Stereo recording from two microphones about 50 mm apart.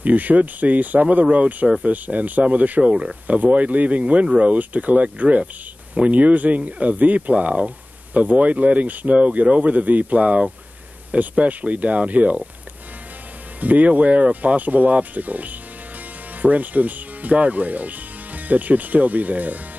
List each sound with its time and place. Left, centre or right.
0.0 s speech: right
2.8 s speech: centre
13.6 s speech: right